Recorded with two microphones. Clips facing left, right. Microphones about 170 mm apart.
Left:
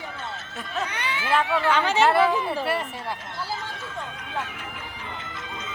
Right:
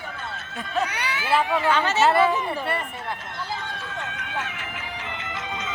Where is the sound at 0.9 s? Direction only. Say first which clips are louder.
Left 2 dB; 10° right (ahead or behind).